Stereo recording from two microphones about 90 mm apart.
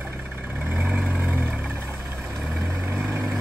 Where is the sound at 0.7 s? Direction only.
15° right (ahead or behind).